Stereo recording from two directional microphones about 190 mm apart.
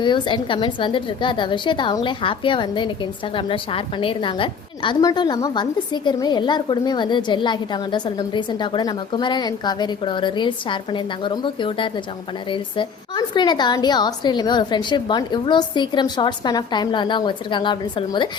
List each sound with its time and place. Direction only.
0.0 s a woman's voice: 25° left (ahead or behind)